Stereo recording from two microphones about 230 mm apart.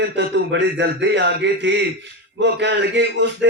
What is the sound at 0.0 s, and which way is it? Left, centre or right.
A man's voice, right.